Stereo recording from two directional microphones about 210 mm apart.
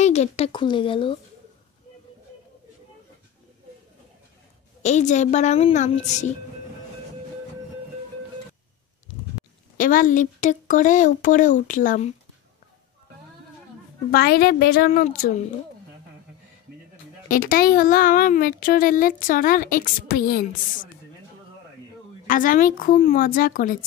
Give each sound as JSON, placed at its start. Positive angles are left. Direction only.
{"t": 0.0, "sound": "speech", "side_deg": 30}
{"t": 4.8, "sound": "speech", "side_deg": 35}
{"t": 9.8, "sound": "speech", "side_deg": 40}
{"t": 14.1, "sound": "speech", "side_deg": 45}
{"t": 14.9, "sound": "speech", "side_deg": 35}
{"t": 17.3, "sound": "speech", "side_deg": 45}
{"t": 22.3, "sound": "speech", "side_deg": 40}